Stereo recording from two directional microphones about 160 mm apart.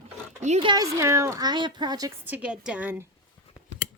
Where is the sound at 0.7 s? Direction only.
20° right (ahead or behind).